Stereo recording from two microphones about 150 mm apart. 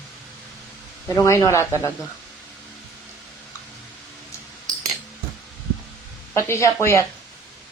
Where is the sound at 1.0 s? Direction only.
20° left (ahead or behind).